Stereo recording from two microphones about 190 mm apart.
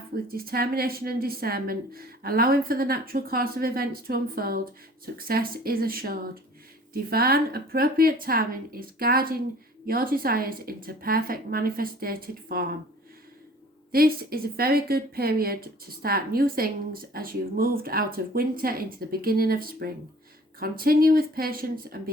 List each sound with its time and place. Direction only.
0.3 s a woman's voice: 50° right (ahead or behind)
13.9 s a woman's voice: 50° right (ahead or behind)